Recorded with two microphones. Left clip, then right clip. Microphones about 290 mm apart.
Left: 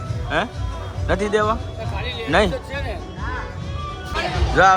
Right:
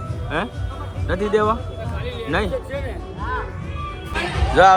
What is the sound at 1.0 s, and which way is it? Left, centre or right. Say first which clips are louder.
Speech: even; centre.